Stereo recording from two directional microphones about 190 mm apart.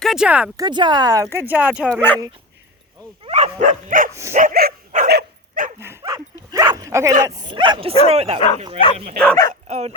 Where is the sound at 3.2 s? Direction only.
35° right (ahead or behind).